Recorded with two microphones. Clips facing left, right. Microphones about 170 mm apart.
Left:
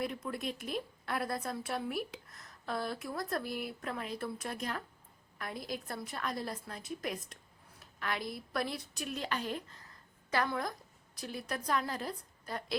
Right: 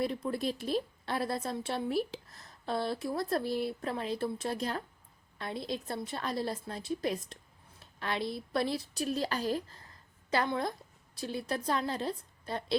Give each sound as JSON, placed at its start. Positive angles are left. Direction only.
{"t": 0.0, "sound": "a woman's voice", "side_deg": -30}